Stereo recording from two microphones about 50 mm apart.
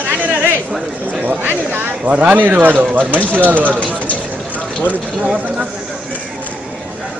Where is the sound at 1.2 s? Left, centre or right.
Right.